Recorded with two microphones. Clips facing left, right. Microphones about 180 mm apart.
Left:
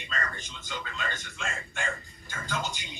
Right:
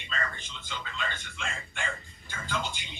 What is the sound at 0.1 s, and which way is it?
Speech, 45° left (ahead or behind).